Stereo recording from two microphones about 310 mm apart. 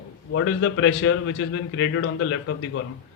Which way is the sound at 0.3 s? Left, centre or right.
Left.